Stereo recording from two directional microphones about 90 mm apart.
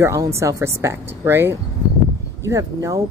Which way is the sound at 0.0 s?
35° right (ahead or behind).